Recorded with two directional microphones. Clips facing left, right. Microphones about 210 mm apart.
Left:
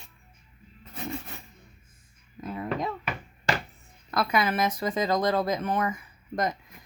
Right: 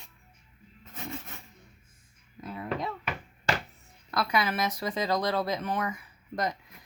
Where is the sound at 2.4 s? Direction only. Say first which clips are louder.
Left 3 dB; 45° left (ahead or behind).